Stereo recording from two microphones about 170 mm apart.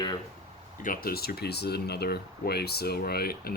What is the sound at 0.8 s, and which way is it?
Speech, 55° left (ahead or behind).